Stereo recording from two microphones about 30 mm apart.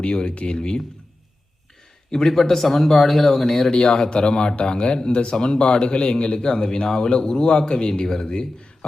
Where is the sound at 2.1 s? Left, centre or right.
Centre.